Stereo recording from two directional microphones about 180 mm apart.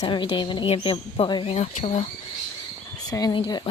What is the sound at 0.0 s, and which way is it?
Speech, 25° left (ahead or behind).